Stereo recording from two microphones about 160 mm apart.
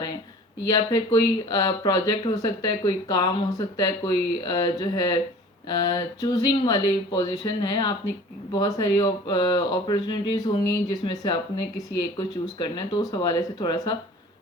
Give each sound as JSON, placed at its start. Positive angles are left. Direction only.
{"t": 0.7, "sound": "speech", "side_deg": 25}